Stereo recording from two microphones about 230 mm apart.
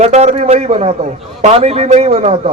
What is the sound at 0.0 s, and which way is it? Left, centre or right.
A man's voice, right.